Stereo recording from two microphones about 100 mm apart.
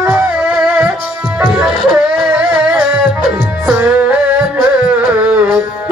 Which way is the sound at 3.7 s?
15° right (ahead or behind).